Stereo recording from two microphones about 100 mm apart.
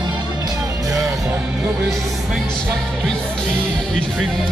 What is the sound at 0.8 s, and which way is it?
Music, 30° right (ahead or behind).